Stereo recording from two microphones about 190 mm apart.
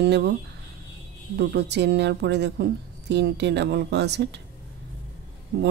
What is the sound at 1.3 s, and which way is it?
Speech, 60° right (ahead or behind).